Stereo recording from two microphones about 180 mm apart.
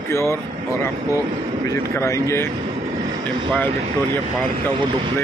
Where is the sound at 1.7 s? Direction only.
15° left (ahead or behind).